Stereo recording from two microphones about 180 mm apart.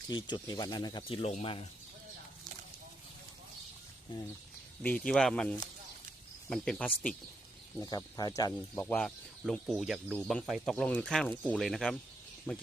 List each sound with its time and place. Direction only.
0.1 s speech: 25° left (ahead or behind)
1.2 s speech: 35° left (ahead or behind)
4.8 s speech: 5° left (ahead or behind)
7.8 s speech: 20° left (ahead or behind)
8.8 s speech: 5° left (ahead or behind)